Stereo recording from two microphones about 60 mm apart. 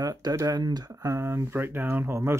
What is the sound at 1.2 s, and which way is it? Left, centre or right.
Speech, right.